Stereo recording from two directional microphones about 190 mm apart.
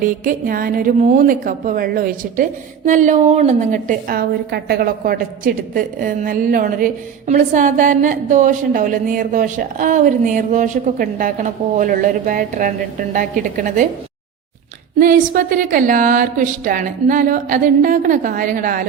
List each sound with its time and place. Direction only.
0.0 s a woman's voice: 45° right (ahead or behind)
14.9 s a woman's voice: 45° right (ahead or behind)